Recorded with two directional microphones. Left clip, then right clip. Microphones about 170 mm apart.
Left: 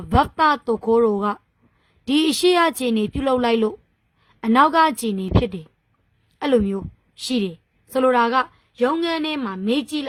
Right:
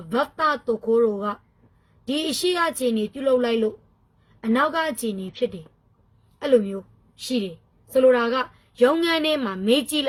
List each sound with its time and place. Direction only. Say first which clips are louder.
0.1 s a woman's voice: left 5 dB; 45° left (ahead or behind)
8.7 s a woman's voice: right 2 dB; 30° left (ahead or behind)